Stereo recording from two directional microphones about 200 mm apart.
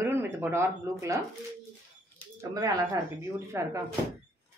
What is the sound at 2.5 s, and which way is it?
A woman's voice, 15° right (ahead or behind).